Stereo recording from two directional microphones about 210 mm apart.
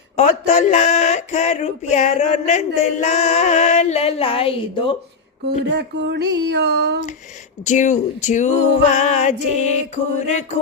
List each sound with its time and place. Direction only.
0.2 s speech: 35° left (ahead or behind)
5.5 s speech: 55° right (ahead or behind)
7.6 s speech: 35° left (ahead or behind)